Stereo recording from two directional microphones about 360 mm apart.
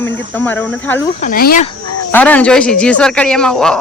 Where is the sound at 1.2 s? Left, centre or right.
Left.